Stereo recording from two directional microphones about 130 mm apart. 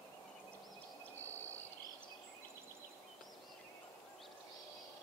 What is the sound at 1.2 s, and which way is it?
Cricket, 15° left (ahead or behind).